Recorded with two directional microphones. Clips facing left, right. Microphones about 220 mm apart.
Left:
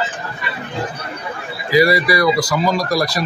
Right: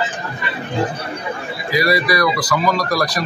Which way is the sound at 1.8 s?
30° left (ahead or behind).